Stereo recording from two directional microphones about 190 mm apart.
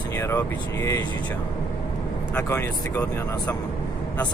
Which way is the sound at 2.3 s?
10° left (ahead or behind).